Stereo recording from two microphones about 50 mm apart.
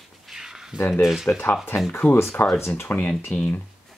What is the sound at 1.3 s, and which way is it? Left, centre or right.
Speech, left.